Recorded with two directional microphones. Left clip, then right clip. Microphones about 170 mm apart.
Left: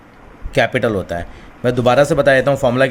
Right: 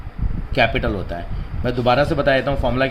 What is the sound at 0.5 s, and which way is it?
Speech, 50° left (ahead or behind).